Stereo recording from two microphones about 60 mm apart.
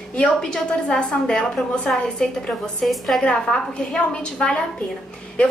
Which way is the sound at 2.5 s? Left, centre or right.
Centre.